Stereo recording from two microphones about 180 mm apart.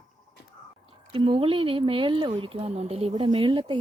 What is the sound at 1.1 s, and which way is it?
Speech, 25° right (ahead or behind).